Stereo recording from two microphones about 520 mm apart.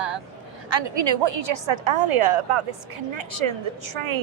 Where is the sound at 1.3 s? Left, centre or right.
Right.